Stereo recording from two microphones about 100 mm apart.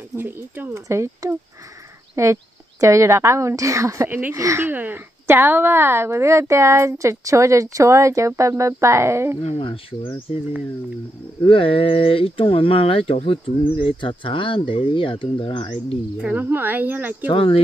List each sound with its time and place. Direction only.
0.1 s speech: 20° right (ahead or behind)
4.1 s speech: 15° right (ahead or behind)
4.4 s speech: 30° right (ahead or behind)
4.6 s speech: 20° right (ahead or behind)
9.4 s speech: 80° left; by 10.1 s 65° left (ahead or behind)
11.4 s speech: 65° left (ahead or behind)
16.2 s speech: 15° right (ahead or behind)
17.3 s speech: 65° left (ahead or behind)